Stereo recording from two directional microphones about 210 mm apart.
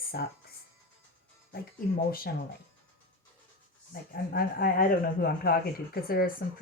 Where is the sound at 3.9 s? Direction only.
45° left (ahead or behind).